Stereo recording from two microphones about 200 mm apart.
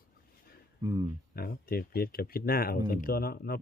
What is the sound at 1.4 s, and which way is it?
Speech, 50° left (ahead or behind).